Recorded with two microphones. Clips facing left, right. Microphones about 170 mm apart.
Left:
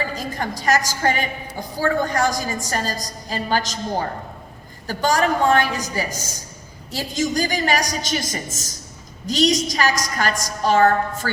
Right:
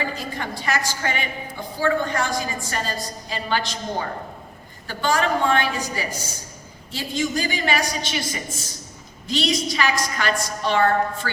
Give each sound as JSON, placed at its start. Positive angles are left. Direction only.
{"t": 0.2, "sound": "a woman's voice", "side_deg": 40}